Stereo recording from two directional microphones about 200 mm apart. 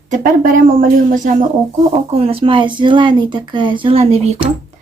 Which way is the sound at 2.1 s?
30° right (ahead or behind).